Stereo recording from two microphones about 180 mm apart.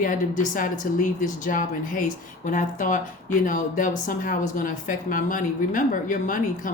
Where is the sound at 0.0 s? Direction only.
50° left (ahead or behind).